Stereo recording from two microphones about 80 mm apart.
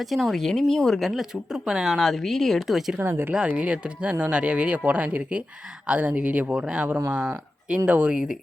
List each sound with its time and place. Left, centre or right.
0.0 s speech: centre
3.0 s speech: right
3.5 s speech: centre